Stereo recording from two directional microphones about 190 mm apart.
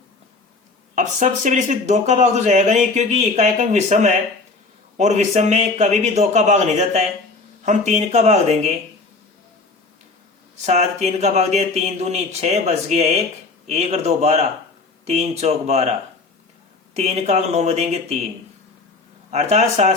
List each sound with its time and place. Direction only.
0.9 s speech: 40° right (ahead or behind)
10.7 s speech: 35° right (ahead or behind)
19.3 s speech: 35° right (ahead or behind)